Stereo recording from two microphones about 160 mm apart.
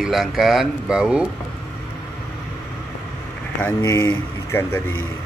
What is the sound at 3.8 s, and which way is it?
Speech, 20° left (ahead or behind).